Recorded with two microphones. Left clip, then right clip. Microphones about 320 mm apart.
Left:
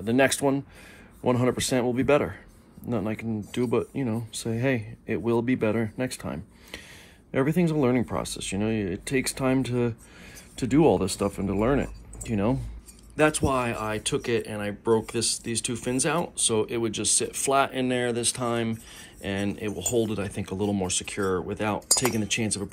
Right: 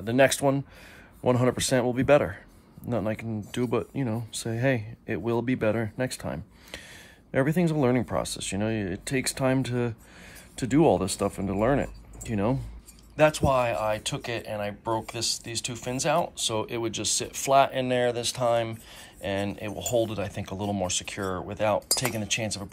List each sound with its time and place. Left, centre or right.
0.2 s speech: right